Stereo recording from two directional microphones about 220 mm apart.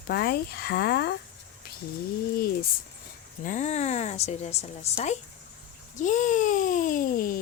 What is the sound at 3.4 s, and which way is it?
Speech, 35° left (ahead or behind).